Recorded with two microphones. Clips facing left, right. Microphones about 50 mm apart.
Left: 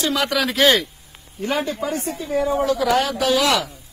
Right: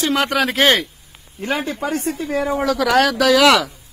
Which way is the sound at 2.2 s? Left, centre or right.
Right.